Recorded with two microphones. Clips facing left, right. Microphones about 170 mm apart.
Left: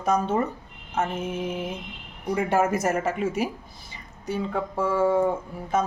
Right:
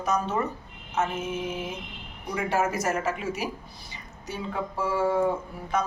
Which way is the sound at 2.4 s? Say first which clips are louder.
Left 2 dB; 55° left (ahead or behind).